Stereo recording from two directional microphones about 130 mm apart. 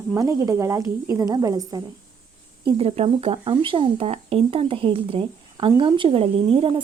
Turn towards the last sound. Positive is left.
turn(degrees=-45)  # may be behind; listen again after turning